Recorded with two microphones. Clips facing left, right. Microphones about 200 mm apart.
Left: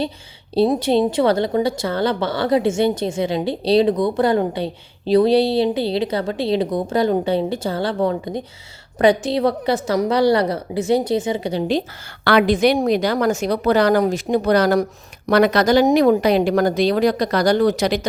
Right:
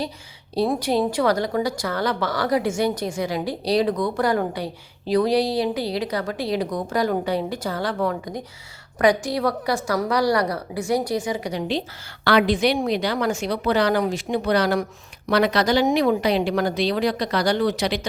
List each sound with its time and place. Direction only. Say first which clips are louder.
0.5 s a woman's voice: left 5 dB; 25° left (ahead or behind)
12.2 s speech: left 4 dB; 55° left (ahead or behind)